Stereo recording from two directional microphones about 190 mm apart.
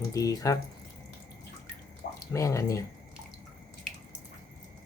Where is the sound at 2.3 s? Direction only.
15° left (ahead or behind).